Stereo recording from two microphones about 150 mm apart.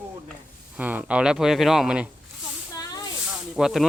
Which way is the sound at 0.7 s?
10° right (ahead or behind).